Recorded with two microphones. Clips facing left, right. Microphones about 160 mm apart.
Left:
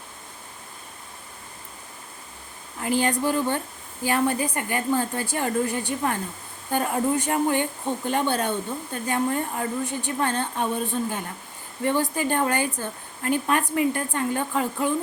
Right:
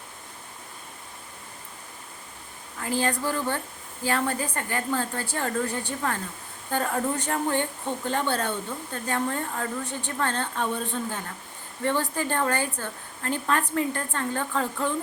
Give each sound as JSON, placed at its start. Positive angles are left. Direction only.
{"t": 2.8, "sound": "speech", "side_deg": 20}